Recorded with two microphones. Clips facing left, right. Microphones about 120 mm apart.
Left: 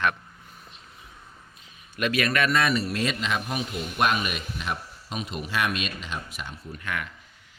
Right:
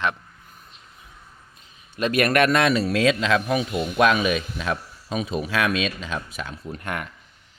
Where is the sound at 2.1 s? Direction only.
55° right (ahead or behind); by 3.8 s 90° right.